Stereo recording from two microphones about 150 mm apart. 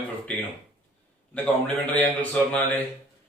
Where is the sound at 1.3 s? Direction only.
10° left (ahead or behind).